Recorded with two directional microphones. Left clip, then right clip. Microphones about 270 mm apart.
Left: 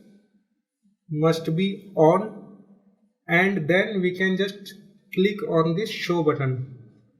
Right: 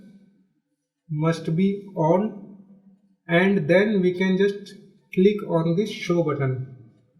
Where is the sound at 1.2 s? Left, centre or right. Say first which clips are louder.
Left 2 dB; left.